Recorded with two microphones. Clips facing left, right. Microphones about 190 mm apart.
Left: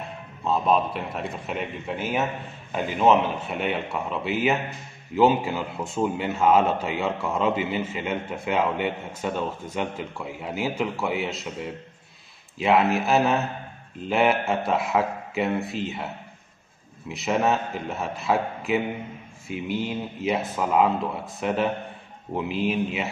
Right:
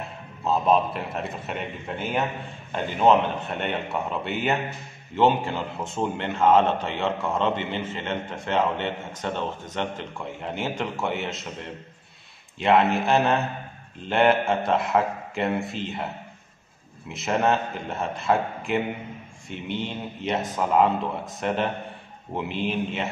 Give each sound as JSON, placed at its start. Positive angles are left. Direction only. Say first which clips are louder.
{"t": 0.4, "sound": "a man's voice", "louder": "right 1 dB", "side_deg": 0}
{"t": 17.1, "sound": "speech", "louder": "even", "side_deg": 0}